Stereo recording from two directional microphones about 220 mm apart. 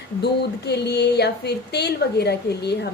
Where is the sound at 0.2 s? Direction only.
50° left (ahead or behind).